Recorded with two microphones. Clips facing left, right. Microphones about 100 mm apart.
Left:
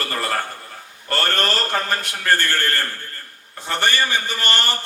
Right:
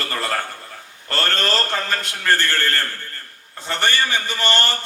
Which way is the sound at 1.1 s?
15° left (ahead or behind).